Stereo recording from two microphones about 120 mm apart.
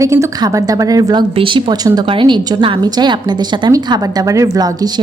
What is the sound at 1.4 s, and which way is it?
A woman's voice, 45° right (ahead or behind).